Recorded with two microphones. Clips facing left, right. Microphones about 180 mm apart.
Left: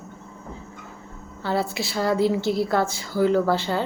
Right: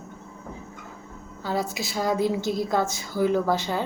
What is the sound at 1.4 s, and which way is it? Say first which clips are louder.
A woman's voice: left 3 dB; 15° right (ahead or behind).